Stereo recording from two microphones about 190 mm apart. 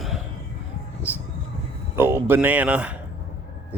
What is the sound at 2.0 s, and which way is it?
Speech, 10° right (ahead or behind).